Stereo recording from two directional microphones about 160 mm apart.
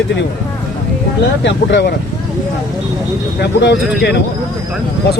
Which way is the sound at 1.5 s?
90° left.